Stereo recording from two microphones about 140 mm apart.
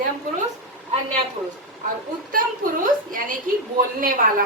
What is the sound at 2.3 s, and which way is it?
A woman's voice, 75° right (ahead or behind).